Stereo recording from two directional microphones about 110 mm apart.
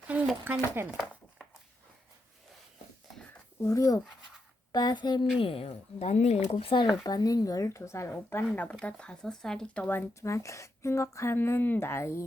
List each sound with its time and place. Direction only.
0.4 s speech: 15° right (ahead or behind)
3.6 s speech: 30° left (ahead or behind)
4.7 s speech: 40° left (ahead or behind)
5.4 s a woman's voice: 60° left (ahead or behind); by 6.4 s 85° left
6.5 s speech: 55° left (ahead or behind)
6.8 s speech: 35° left (ahead or behind); by 8.4 s 20° left (ahead or behind)
8.8 s speech: 10° left (ahead or behind)